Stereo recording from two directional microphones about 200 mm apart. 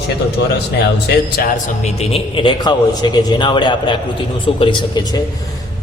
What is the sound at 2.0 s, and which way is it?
A man's voice, 25° left (ahead or behind).